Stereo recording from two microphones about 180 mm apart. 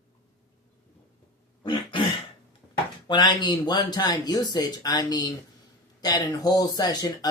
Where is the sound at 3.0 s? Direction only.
25° left (ahead or behind).